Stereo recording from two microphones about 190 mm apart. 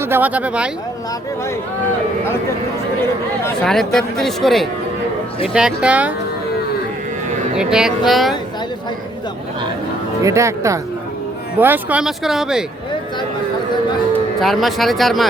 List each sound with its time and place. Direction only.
0.0 s speech: 10° right (ahead or behind)
3.6 s speech: centre (ahead or behind)
7.5 s speech: 5° right (ahead or behind)
10.2 s speech: 15° right (ahead or behind)
14.4 s speech: centre (ahead or behind)